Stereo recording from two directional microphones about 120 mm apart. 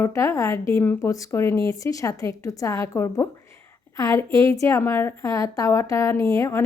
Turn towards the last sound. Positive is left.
turn(degrees=25)  # may be behind; listen again after turning